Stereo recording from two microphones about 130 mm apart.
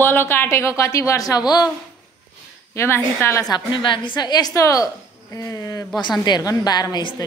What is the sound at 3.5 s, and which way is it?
A woman's voice, 40° left (ahead or behind).